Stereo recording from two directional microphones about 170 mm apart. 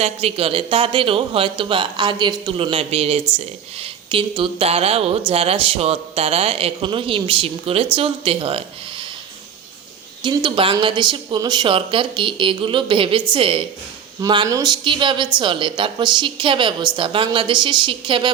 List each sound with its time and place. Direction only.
0.0 s speech: 35° right (ahead or behind)
10.2 s a woman's voice: 30° right (ahead or behind)